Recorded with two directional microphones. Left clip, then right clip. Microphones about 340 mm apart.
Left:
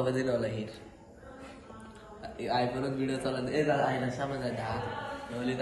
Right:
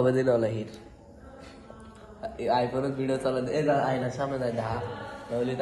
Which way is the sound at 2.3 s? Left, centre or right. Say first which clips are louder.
Right 5 dB; centre.